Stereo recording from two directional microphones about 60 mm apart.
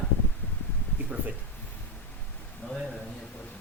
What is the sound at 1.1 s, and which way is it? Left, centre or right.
Speech, centre.